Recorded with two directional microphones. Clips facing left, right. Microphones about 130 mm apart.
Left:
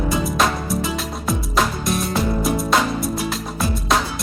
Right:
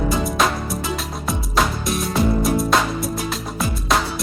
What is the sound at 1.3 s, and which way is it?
Music, centre (ahead or behind).